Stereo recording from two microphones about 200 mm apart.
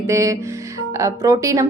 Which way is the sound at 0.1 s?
15° right (ahead or behind).